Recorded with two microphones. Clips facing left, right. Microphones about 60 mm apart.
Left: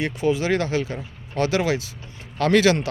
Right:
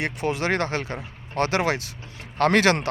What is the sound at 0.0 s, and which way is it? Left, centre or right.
Speech, right.